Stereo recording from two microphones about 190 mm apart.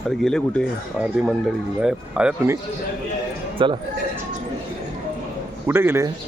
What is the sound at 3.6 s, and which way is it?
Speech, 25° right (ahead or behind).